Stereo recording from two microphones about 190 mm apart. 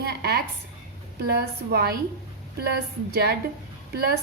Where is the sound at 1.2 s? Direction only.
55° right (ahead or behind).